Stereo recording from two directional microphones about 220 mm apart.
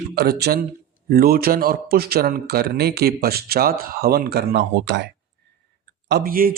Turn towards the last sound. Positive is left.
turn(degrees=-40)  # may be behind; listen again after turning